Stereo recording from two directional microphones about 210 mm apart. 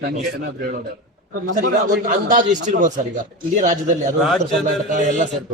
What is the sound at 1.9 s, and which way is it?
A man's voice, 40° right (ahead or behind).